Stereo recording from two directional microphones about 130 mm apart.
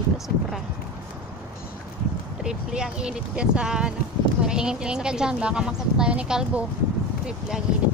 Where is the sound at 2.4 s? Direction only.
5° right (ahead or behind).